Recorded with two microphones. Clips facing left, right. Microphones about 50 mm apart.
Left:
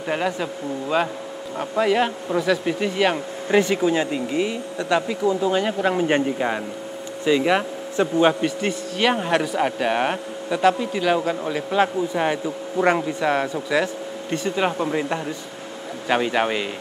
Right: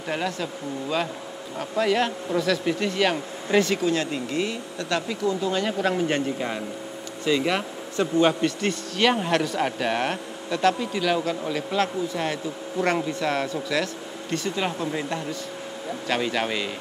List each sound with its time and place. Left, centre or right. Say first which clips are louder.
0.1 s speech: left 4 dB; centre